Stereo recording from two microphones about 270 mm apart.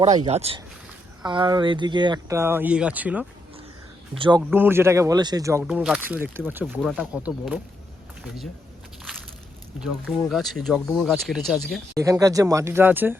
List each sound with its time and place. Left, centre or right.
0.3 s speech: right; by 3.2 s centre
4.1 s speech: centre
9.8 s speech: centre
11.9 s speech: centre